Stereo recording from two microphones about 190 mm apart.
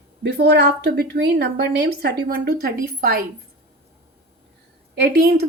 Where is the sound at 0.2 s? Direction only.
60° right (ahead or behind).